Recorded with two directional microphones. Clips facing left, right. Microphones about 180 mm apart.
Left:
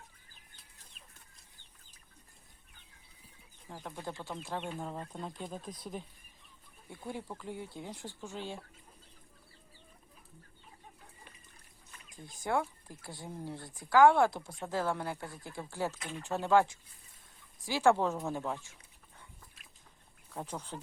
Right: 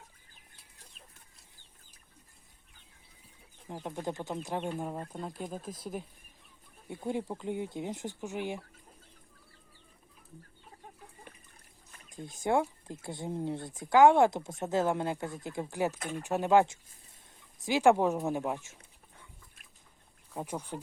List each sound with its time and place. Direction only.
3.8 s speech: 20° right (ahead or behind)
6.8 s speech: 20° right (ahead or behind)
12.1 s speech: 25° right (ahead or behind)
16.0 s speech: 45° right (ahead or behind)
16.2 s speech: 15° right (ahead or behind)
20.3 s speech: 10° right (ahead or behind)